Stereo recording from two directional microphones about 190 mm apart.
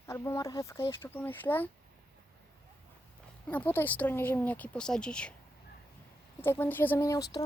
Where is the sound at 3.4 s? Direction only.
10° left (ahead or behind).